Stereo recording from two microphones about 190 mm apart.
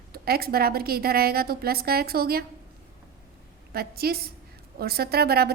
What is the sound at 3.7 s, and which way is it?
A woman's voice, 55° right (ahead or behind).